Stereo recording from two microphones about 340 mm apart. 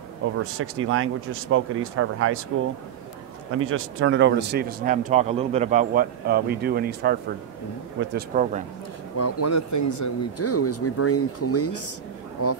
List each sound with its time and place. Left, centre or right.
0.6 s speech: right
3.5 s a man's voice: right
9.1 s speech: left